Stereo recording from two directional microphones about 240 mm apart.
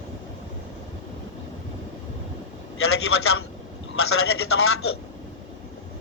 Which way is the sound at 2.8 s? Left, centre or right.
Left.